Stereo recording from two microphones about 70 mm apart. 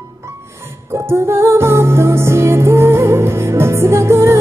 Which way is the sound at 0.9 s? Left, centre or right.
Right.